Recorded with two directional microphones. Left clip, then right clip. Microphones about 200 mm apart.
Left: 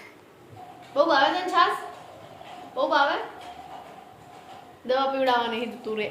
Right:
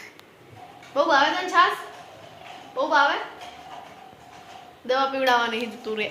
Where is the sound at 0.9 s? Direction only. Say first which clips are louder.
Right 1 dB; 30° right (ahead or behind).